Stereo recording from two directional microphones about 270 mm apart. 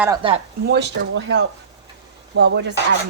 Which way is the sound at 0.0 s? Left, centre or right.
Centre.